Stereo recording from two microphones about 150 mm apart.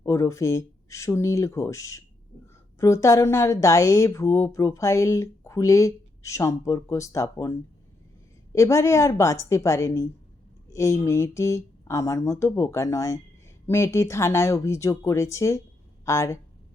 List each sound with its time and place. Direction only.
0.0 s speech: 20° left (ahead or behind)